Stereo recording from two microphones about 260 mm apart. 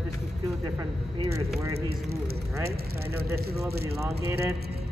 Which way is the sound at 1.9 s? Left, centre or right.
Right.